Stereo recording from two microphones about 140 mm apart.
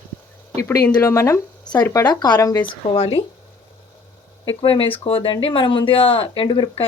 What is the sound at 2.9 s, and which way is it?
Speech, 45° left (ahead or behind).